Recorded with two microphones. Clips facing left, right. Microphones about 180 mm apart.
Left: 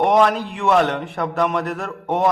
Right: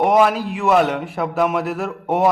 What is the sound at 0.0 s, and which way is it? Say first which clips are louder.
A man's voice: right 1 dB; 5° right (ahead or behind).